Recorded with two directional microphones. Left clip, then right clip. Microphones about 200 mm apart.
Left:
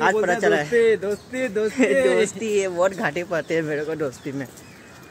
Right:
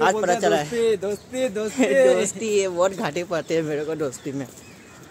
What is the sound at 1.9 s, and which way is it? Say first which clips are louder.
Speech: right 4 dB; 30° right (ahead or behind).